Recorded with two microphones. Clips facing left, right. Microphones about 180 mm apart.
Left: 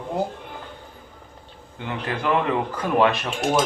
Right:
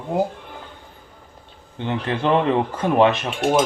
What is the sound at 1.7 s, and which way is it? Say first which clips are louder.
Speech: right 4 dB; 25° right (ahead or behind).